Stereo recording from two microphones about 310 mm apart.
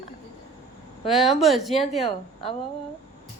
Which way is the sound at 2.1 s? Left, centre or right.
Centre.